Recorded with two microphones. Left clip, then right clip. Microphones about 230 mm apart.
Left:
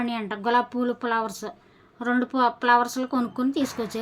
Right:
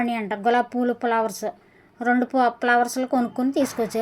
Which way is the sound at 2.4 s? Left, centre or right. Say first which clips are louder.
Left 1 dB; centre.